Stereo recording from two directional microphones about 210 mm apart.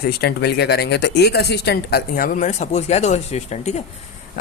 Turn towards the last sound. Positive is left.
turn(degrees=30)  # may be behind; listen again after turning